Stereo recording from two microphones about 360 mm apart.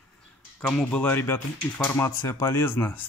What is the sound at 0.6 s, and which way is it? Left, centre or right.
Speech, centre.